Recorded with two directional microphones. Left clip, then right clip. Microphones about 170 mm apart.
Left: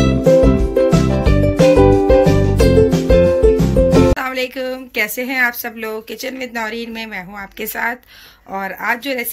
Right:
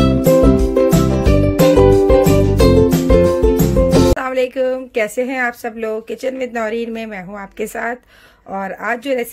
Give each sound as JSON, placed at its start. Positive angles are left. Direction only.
{"t": 0.0, "sound": "music", "side_deg": 0}
{"t": 4.2, "sound": "a woman's voice", "side_deg": -50}